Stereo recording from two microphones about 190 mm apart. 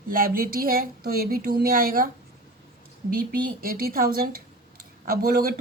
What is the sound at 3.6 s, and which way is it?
Speech, 50° right (ahead or behind).